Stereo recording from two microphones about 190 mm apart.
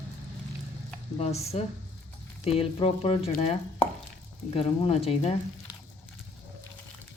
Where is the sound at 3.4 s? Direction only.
30° left (ahead or behind).